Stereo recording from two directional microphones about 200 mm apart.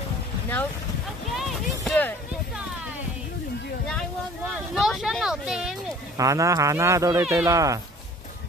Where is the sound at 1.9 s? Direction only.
10° left (ahead or behind).